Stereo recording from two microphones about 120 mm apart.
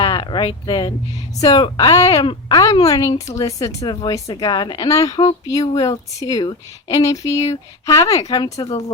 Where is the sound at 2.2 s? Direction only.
40° left (ahead or behind).